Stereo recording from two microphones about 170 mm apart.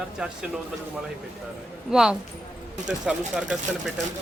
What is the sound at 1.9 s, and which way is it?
Speech, 5° right (ahead or behind).